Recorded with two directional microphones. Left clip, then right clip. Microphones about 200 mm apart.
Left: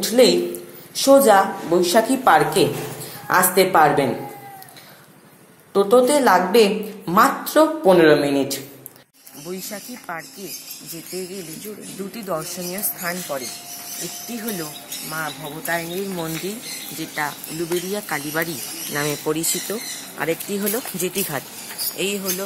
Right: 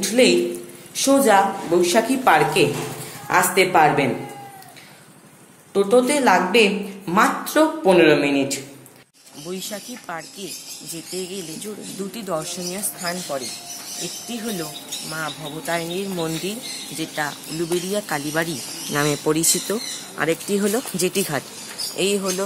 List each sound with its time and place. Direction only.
0.0 s a woman's voice: 10° left (ahead or behind)
5.7 s a woman's voice: 10° left (ahead or behind)
9.5 s speech: 5° right (ahead or behind)
12.3 s speech: centre (ahead or behind); by 16.5 s 15° right (ahead or behind)
17.1 s speech: 30° right (ahead or behind)